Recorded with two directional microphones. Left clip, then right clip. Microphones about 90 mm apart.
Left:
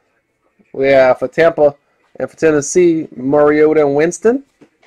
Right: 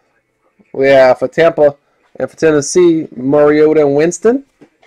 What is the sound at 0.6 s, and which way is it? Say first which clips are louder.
Speech: right 2 dB; 20° right (ahead or behind).